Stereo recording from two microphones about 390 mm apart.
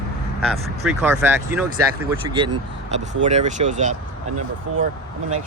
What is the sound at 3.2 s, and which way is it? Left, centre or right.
Speech, centre.